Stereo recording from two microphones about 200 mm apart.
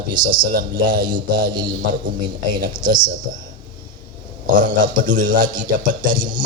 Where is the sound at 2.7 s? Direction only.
20° right (ahead or behind).